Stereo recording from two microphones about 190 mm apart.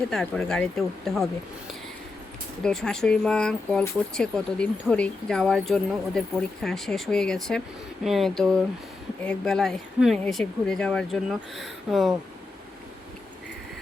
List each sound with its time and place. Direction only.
0.1 s speech: 5° left (ahead or behind)
2.6 s speech: 5° left (ahead or behind)